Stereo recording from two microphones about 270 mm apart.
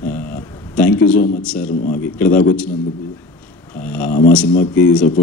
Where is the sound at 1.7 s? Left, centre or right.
Left.